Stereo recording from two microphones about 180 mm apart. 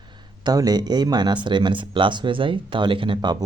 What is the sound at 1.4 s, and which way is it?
Speech, 25° right (ahead or behind).